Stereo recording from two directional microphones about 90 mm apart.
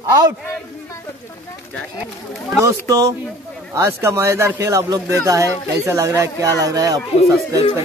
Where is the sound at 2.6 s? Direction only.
35° right (ahead or behind).